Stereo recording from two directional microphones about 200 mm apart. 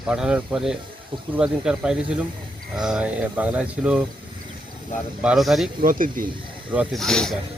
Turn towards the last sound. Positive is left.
turn(degrees=0)  # may be behind; listen again after turning